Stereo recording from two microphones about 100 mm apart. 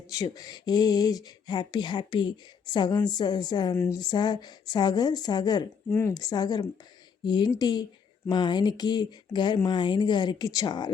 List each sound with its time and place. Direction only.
0.1 s speech: 35° left (ahead or behind)
5.9 s speech: 25° left (ahead or behind)
6.1 s speech: 40° left (ahead or behind)